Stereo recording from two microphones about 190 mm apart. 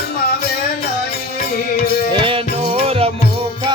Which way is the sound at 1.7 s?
55° left (ahead or behind).